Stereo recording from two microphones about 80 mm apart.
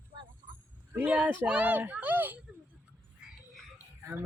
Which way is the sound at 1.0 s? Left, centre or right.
Centre.